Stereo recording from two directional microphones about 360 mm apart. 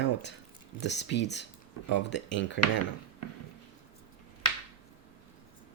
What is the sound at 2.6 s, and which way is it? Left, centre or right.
Dishes, left.